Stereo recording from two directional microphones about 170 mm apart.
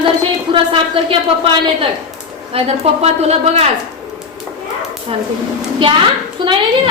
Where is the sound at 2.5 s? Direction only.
35° right (ahead or behind).